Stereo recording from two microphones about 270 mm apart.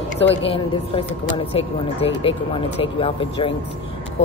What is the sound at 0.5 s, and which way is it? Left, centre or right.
Speech, centre.